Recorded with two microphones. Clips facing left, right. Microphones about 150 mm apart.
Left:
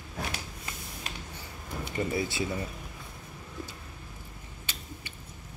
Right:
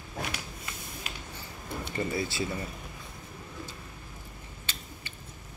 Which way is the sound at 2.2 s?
20° left (ahead or behind).